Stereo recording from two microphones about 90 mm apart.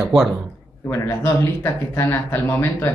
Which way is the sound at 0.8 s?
25° left (ahead or behind).